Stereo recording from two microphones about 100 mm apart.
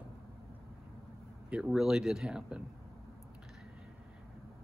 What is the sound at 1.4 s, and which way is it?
Speech, 10° right (ahead or behind).